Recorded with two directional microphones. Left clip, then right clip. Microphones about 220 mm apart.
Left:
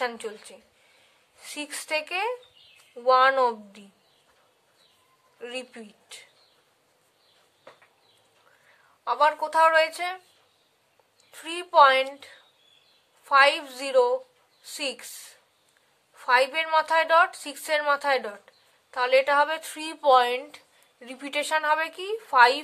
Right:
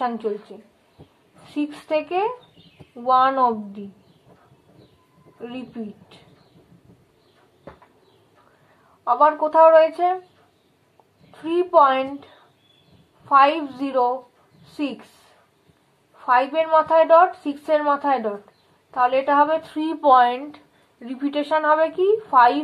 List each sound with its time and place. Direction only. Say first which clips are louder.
0.0 s speech: right 6 dB; 40° left (ahead or behind)
5.4 s speech: right 2 dB; 40° left (ahead or behind)
9.0 s speech: right 6 dB; 30° left (ahead or behind)
11.4 s speech: right 2 dB; 35° left (ahead or behind)
13.3 s speech: right 4 dB; 35° left (ahead or behind)
16.2 s speech: right 4 dB; 35° left (ahead or behind)